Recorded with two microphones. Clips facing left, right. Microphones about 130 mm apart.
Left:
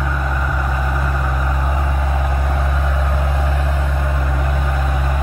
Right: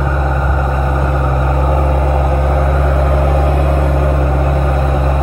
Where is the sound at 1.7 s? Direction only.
50° right (ahead or behind).